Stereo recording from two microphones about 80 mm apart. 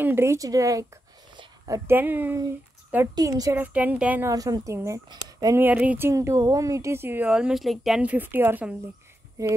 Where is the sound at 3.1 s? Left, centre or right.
Right.